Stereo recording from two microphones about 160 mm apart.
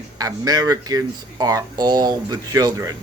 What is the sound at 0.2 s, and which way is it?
Speech, 25° right (ahead or behind).